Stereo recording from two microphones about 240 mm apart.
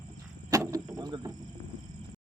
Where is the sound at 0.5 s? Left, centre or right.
Centre.